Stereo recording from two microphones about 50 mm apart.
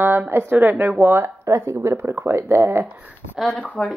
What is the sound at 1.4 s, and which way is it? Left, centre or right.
Speech, right.